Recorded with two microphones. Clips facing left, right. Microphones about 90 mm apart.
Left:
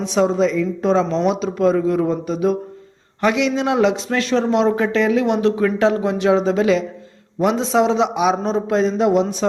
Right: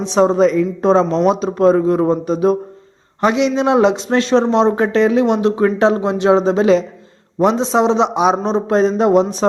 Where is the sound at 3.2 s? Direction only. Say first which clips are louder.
Right 3 dB; 25° right (ahead or behind).